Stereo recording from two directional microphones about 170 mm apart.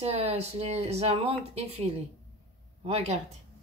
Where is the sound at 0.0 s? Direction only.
35° right (ahead or behind).